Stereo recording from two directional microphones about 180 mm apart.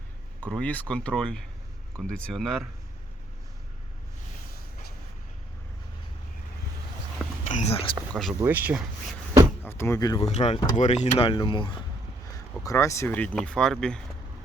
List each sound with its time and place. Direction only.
0.4 s speech: 5° left (ahead or behind)
7.2 s a sound: 5° left (ahead or behind)
7.5 s speech: 35° left (ahead or behind)
8.1 s speech: centre (ahead or behind)
8.4 s speech: 10° right (ahead or behind)
9.6 s speech: 15° left (ahead or behind)
10.2 s speech: 35° left (ahead or behind)
12.6 s speech: 15° left (ahead or behind)